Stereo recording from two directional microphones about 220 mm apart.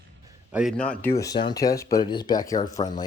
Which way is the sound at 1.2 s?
20° left (ahead or behind).